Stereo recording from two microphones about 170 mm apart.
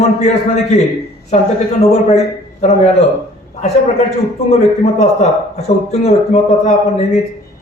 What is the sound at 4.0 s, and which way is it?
A man's voice, 40° left (ahead or behind).